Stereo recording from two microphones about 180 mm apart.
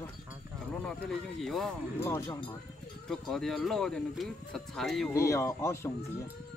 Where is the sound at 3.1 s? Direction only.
Centre (ahead or behind).